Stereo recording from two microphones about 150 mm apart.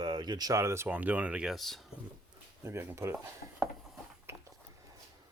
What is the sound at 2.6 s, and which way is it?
Speech, 15° right (ahead or behind).